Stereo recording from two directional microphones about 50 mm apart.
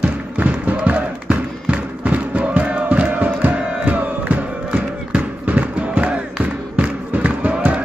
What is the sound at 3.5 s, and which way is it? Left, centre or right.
Crowd, right.